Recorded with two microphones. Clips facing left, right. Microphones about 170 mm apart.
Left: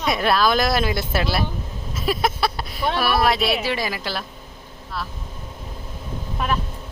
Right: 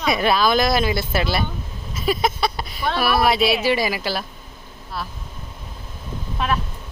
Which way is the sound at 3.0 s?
Centre (ahead or behind).